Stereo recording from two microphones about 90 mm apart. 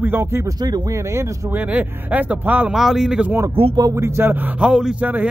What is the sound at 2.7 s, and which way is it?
Speech, 5° right (ahead or behind).